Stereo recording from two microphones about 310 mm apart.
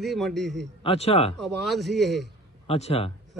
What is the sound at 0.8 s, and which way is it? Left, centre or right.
Speech, centre.